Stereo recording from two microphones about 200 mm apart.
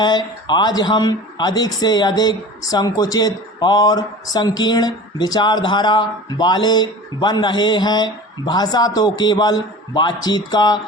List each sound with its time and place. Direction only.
0.0 s speech: 20° left (ahead or behind)